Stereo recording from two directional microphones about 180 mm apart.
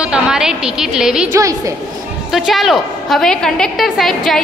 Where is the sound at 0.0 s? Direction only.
5° right (ahead or behind).